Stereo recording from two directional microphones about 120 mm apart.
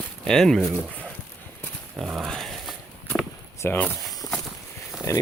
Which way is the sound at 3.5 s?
20° left (ahead or behind).